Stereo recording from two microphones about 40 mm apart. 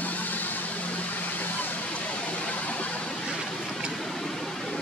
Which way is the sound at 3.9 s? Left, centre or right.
Centre.